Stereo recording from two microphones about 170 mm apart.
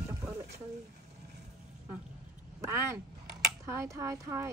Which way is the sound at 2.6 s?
15° right (ahead or behind).